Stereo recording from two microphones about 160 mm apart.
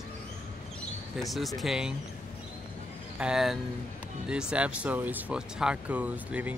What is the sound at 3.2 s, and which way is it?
Speech, 5° right (ahead or behind).